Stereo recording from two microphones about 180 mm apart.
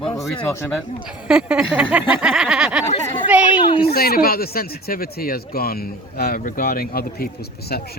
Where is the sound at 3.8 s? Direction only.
60° left (ahead or behind).